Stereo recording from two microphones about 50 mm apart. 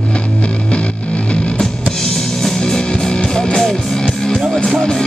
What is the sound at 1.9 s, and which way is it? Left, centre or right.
Music, centre.